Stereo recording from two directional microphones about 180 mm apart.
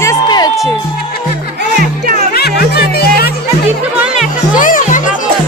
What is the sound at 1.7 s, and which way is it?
Music, 60° right (ahead or behind).